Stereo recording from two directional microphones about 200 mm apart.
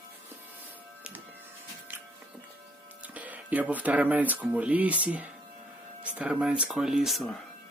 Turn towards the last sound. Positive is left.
turn(degrees=0)  # may be behind; listen again after turning